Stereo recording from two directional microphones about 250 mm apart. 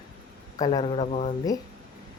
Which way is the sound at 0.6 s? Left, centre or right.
Centre.